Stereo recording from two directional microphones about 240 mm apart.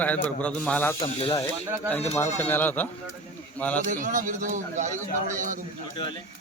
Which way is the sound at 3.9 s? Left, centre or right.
Right.